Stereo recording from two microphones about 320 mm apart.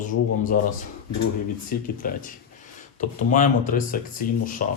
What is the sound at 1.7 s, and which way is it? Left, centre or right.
Speech, left.